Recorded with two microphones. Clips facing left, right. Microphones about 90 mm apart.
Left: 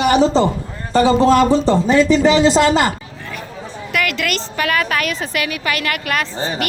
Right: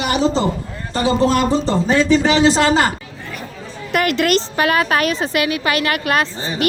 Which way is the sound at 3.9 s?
35° right (ahead or behind).